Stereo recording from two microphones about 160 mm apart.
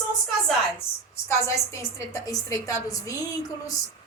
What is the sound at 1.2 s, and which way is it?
A woman's voice, 15° left (ahead or behind).